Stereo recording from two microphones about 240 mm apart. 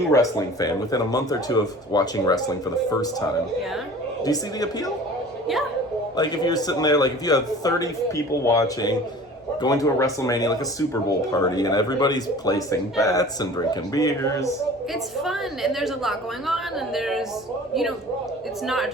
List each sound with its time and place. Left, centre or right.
0.1 s a man's voice: centre
4.2 s a man's voice: centre
6.1 s a man's voice: centre
15.2 s a woman's voice: centre
18.6 s a woman's voice: centre